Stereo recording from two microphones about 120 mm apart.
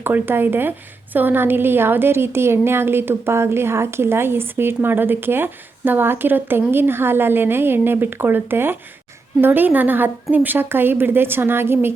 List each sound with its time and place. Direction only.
0.0 s a woman's voice: 20° right (ahead or behind)